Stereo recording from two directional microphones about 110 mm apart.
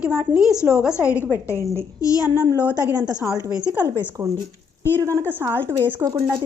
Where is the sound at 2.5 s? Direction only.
20° left (ahead or behind).